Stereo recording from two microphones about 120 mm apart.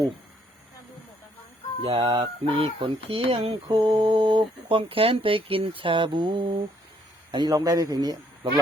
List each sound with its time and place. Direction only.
1.8 s speech: 50° right (ahead or behind)